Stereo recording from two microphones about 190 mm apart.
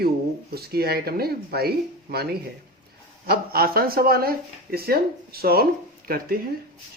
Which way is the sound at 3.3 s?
50° right (ahead or behind).